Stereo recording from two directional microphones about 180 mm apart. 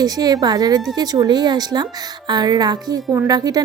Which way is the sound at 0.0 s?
20° right (ahead or behind).